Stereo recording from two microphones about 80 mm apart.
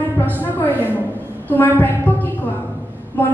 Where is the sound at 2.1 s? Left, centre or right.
Left.